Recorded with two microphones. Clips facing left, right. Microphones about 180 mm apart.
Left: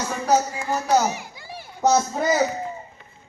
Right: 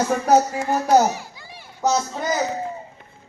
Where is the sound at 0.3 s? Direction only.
40° right (ahead or behind).